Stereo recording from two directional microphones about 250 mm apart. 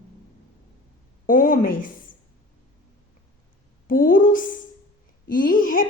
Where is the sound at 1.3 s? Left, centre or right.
Left.